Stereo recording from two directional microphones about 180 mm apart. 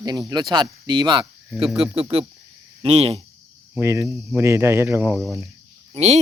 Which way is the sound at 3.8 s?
15° right (ahead or behind).